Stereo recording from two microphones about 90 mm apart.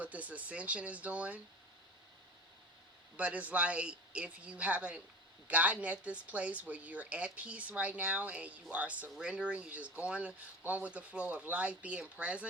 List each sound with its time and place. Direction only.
0.0 s speech: 15° right (ahead or behind)
3.2 s speech: 15° right (ahead or behind)